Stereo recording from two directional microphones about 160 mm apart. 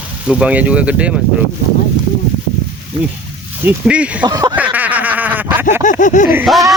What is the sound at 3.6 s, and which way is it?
Speech, 10° right (ahead or behind).